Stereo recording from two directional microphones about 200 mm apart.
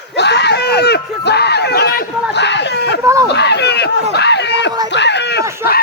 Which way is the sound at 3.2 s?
55° left (ahead or behind).